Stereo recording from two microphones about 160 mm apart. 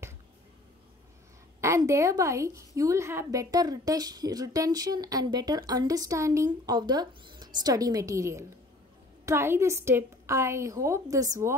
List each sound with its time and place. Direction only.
1.6 s a woman's voice: 20° right (ahead or behind)